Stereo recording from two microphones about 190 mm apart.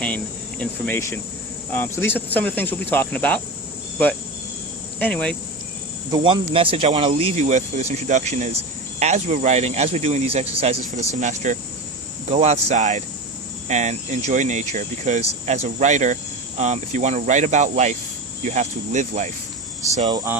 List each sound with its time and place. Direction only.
0.6 s speech: 10° left (ahead or behind)
4.9 s speech: 10° left (ahead or behind)
6.1 s speech: 25° right (ahead or behind); by 19.3 s 40° right (ahead or behind)
20.0 s speech: 25° right (ahead or behind)